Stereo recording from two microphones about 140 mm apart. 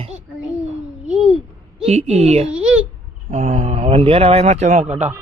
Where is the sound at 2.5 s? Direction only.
5° right (ahead or behind).